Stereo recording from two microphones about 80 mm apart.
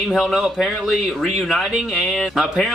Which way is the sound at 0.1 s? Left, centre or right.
Centre.